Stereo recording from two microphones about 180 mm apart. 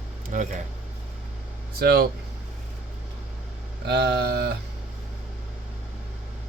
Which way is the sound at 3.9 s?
70° right (ahead or behind).